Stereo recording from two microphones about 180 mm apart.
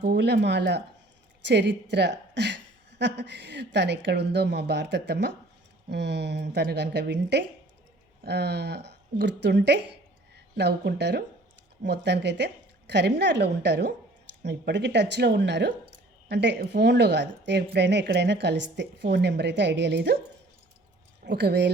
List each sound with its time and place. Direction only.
0.0 s a woman's voice: 65° right (ahead or behind)
21.2 s a woman's voice: 70° right (ahead or behind)